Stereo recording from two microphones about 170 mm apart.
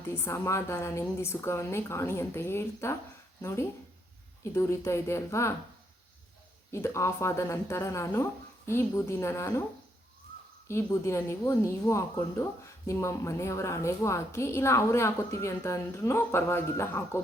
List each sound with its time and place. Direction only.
0.0 s speech: 15° left (ahead or behind)
6.7 s speech: 15° left (ahead or behind)
10.7 s speech: 15° left (ahead or behind)